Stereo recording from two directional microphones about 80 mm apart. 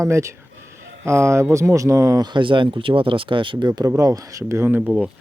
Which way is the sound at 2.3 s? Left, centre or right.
Right.